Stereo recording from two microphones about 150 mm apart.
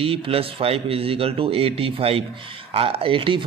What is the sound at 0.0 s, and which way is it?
Speech, 40° right (ahead or behind).